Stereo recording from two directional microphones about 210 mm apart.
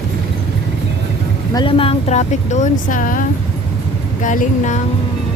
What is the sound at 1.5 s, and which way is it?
Speech, 25° left (ahead or behind).